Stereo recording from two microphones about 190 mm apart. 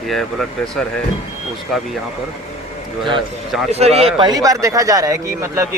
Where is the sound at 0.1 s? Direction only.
Centre (ahead or behind).